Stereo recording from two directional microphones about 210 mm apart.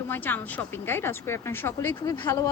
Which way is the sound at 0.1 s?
10° left (ahead or behind).